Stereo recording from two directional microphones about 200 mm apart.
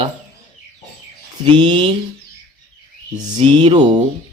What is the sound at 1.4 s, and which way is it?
Speech, 20° right (ahead or behind).